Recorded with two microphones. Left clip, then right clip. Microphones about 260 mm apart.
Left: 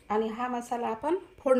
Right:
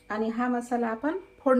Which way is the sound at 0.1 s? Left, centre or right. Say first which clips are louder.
Right 1 dB; left.